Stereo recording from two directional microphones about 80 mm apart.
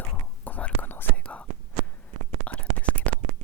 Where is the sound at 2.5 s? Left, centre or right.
Centre.